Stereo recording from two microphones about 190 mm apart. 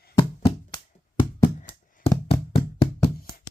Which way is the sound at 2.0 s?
30° left (ahead or behind).